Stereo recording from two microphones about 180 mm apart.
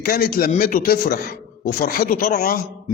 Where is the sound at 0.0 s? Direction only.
55° left (ahead or behind).